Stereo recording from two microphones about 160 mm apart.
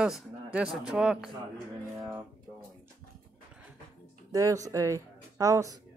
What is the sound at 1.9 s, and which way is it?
Speech, 20° right (ahead or behind).